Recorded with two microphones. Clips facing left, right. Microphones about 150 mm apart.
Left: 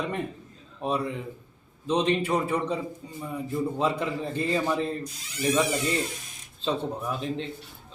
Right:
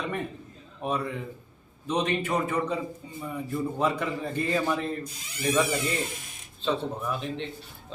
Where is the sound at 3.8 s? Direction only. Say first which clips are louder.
Right 1 dB; 30° left (ahead or behind).